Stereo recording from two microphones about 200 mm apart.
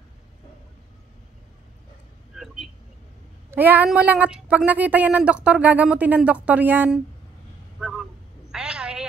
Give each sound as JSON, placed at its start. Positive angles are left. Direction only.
{"t": 2.3, "sound": "vehicle", "side_deg": 0}
{"t": 3.4, "sound": "a woman's voice", "side_deg": -10}
{"t": 7.8, "sound": "a sound", "side_deg": 0}